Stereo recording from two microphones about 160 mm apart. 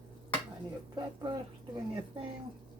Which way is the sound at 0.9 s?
25° right (ahead or behind).